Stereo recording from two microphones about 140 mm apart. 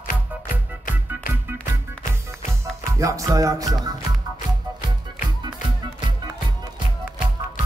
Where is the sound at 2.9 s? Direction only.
20° right (ahead or behind).